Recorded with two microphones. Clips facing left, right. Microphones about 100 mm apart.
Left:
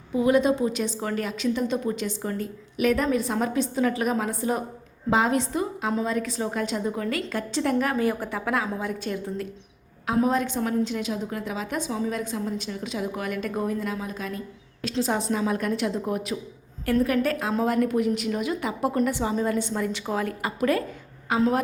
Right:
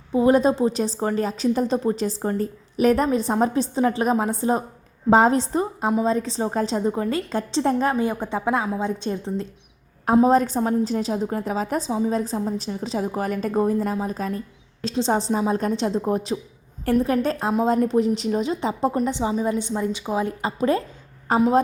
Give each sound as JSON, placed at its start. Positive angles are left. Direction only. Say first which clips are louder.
{"t": 0.1, "sound": "a woman's voice", "louder": "right 3 dB", "side_deg": -35}
{"t": 10.2, "sound": "a woman's voice", "louder": "right 6 dB", "side_deg": -40}
{"t": 11.9, "sound": "a woman's voice", "louder": "right 5 dB", "side_deg": -25}